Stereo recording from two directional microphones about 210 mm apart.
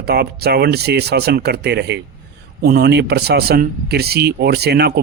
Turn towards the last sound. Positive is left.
turn(degrees=-50)  # may be behind; listen again after turning